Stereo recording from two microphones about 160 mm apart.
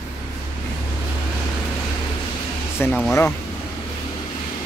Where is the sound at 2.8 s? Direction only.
15° left (ahead or behind).